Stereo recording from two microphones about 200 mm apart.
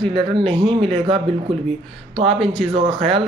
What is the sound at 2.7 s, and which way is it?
Speech, 30° right (ahead or behind).